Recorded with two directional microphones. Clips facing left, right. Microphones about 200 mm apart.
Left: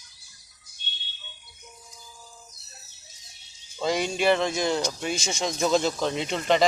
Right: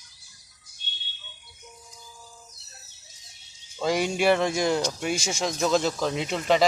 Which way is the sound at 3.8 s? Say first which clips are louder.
Right 1 dB; 10° right (ahead or behind).